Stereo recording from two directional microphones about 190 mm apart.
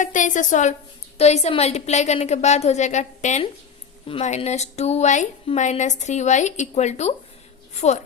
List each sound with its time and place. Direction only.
0.0 s a woman's voice: 40° left (ahead or behind)